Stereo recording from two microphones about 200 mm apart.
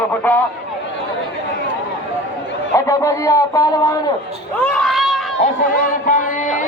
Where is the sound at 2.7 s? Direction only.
15° left (ahead or behind).